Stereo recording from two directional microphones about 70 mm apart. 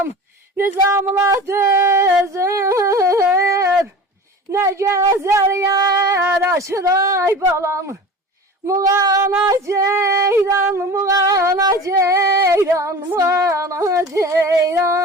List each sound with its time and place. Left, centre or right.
0.9 s music: right
2.2 s female singing: right
3.3 s a sound: right
4.5 s female singing: right
10.9 s female singing: right